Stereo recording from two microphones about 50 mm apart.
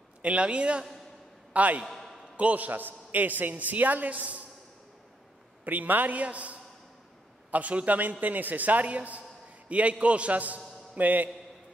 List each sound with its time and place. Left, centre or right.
0.2 s a man's voice: right
1.9 s a sound: centre
2.3 s a man's voice: right
5.7 s a man's voice: right